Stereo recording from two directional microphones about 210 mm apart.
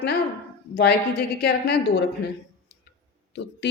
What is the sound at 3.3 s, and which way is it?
Speech, 55° left (ahead or behind).